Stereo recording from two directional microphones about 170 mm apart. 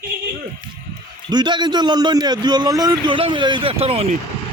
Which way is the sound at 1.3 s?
25° right (ahead or behind).